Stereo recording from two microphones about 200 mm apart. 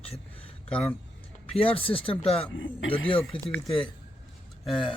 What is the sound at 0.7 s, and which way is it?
Speech, 5° left (ahead or behind).